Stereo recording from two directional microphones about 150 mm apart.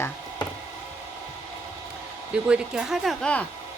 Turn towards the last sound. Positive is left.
turn(degrees=5)  # may be behind; listen again after turning